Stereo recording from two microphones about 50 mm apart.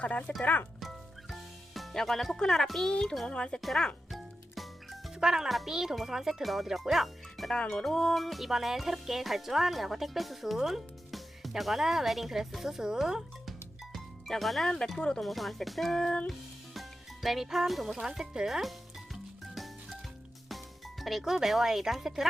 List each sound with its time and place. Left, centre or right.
0.0 s speech: left
0.8 s music: centre
2.6 s speech: centre
4.1 s music: centre
5.2 s speech: centre
13.9 s music: centre
14.9 s speech: centre
15.2 s speech: centre
16.7 s music: centre
17.9 s speech: centre
19.1 s music: centre
20.5 s speech: centre